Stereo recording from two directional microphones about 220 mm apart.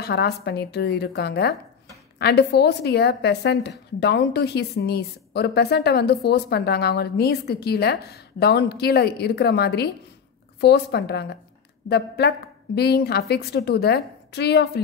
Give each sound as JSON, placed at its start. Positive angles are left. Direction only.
{"t": 0.0, "sound": "a woman's voice", "side_deg": 45}